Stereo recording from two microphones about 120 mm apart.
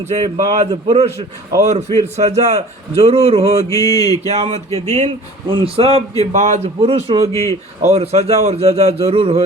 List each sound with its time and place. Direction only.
0.1 s a man's voice: 75° right (ahead or behind)
0.9 s a man's voice: 60° right (ahead or behind)
3.7 s mantra: 30° left (ahead or behind)
4.3 s a man's voice: 60° right (ahead or behind)
5.5 s a man's voice: 45° right (ahead or behind)